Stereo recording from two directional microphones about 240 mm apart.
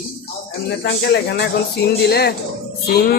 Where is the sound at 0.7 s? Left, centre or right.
Left.